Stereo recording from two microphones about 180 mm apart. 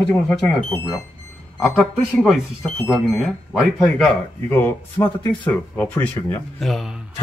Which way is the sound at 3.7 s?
5° left (ahead or behind).